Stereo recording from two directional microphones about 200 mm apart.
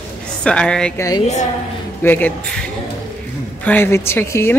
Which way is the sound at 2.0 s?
10° left (ahead or behind).